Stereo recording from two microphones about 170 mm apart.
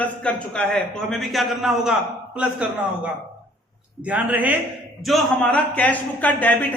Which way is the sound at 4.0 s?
10° right (ahead or behind).